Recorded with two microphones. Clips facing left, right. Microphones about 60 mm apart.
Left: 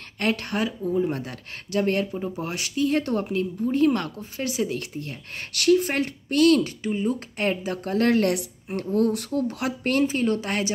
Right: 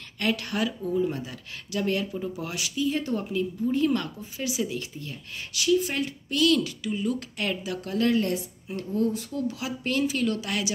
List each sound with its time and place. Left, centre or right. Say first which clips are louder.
0.2 s speech: left 2 dB; left
1.1 s speech: left 3 dB; left
2.1 s speech: left 2 dB; left